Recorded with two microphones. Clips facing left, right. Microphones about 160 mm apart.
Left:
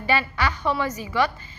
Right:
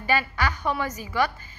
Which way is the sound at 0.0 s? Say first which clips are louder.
Left 1 dB; 45° right (ahead or behind).